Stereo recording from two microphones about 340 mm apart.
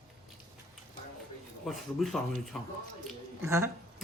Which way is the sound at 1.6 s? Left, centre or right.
Centre.